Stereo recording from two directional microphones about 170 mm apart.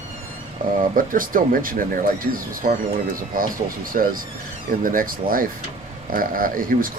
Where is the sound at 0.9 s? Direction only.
55° right (ahead or behind).